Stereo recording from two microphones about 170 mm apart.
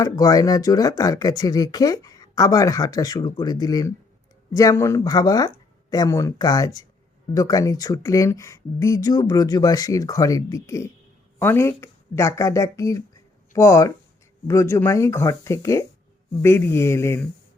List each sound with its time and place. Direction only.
0.0 s speech: 20° left (ahead or behind)